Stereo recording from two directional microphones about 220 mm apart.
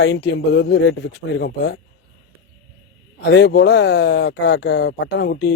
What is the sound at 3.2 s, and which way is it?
Speech, 50° left (ahead or behind).